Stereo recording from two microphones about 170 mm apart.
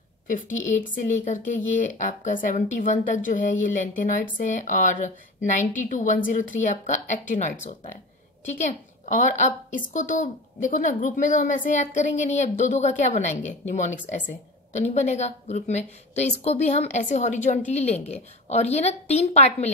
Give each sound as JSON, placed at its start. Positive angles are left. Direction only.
{"t": 0.3, "sound": "a woman's voice", "side_deg": 45}